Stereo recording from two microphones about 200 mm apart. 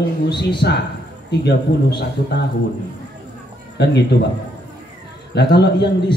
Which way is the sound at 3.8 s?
55° left (ahead or behind).